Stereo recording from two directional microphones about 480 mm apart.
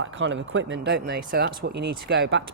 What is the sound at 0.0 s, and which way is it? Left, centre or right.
Speech, right.